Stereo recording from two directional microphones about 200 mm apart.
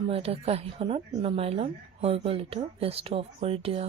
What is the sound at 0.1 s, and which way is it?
Speech, 30° right (ahead or behind).